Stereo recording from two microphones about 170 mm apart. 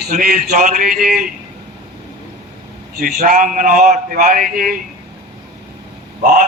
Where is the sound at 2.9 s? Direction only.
55° right (ahead or behind).